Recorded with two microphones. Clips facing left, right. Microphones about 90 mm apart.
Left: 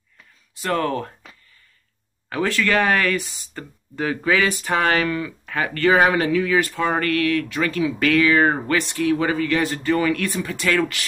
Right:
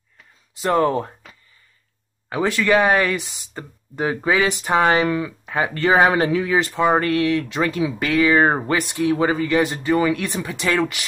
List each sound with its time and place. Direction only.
0.6 s speech: 20° right (ahead or behind)
2.2 s speech: 15° right (ahead or behind)